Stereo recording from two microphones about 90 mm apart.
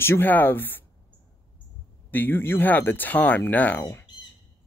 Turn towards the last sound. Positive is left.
turn(degrees=40)  # may be behind; listen again after turning